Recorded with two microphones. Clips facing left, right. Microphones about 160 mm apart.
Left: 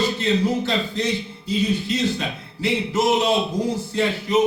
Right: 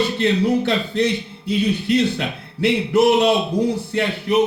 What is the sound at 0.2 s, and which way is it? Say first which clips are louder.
Speech: right 3 dB; 65° right (ahead or behind).